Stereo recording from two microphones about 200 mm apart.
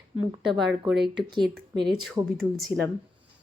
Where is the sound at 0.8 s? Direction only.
Centre (ahead or behind).